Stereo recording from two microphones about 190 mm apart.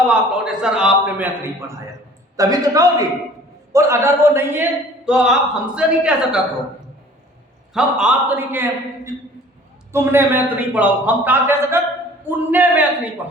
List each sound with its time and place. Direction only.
0.1 s a man's voice: 5° right (ahead or behind)
7.7 s a man's voice: 5° right (ahead or behind)
9.9 s a man's voice: 10° right (ahead or behind)